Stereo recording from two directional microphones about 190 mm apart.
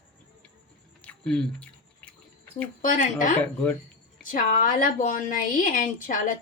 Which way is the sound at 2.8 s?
45° left (ahead or behind).